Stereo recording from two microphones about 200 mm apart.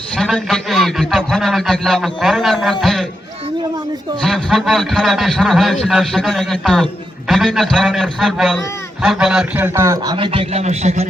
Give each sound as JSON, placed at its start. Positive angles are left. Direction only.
{"t": 0.2, "sound": "a man's voice", "side_deg": 0}
{"t": 4.2, "sound": "a man's voice", "side_deg": 0}
{"t": 10.2, "sound": "a man's voice", "side_deg": -25}